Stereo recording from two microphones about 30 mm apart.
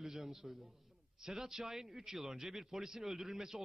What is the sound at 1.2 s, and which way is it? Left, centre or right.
A man's voice, centre.